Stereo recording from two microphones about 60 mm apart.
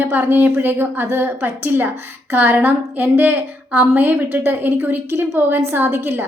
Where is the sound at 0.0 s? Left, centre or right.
Right.